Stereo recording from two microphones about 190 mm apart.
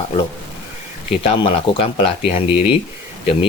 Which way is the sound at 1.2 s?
30° left (ahead or behind).